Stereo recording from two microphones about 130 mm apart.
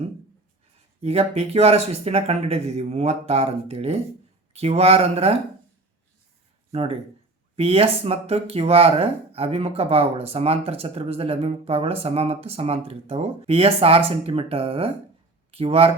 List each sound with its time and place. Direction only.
1.0 s speech: 55° right (ahead or behind)
6.7 s speech: 50° right (ahead or behind)